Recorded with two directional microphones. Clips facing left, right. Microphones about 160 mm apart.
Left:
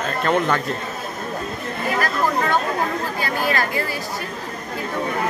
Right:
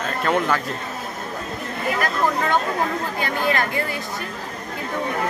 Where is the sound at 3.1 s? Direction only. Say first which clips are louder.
Right 1 dB; 20° right (ahead or behind).